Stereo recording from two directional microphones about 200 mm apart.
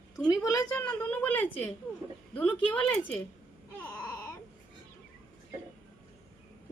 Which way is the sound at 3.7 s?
10° left (ahead or behind).